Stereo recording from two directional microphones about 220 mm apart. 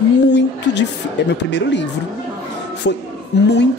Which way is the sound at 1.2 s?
50° left (ahead or behind).